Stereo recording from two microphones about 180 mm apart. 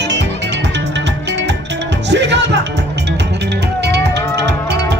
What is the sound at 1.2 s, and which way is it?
Music, 75° right (ahead or behind).